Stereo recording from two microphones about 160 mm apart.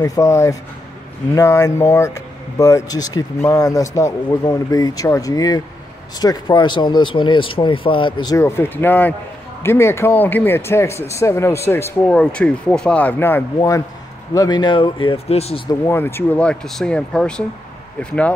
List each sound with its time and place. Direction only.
0.0 s speech: 20° left (ahead or behind); by 15.6 s 40° left (ahead or behind)
15.7 s speech: 20° left (ahead or behind)